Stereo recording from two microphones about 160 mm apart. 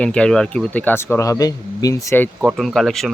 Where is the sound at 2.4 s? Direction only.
Centre (ahead or behind).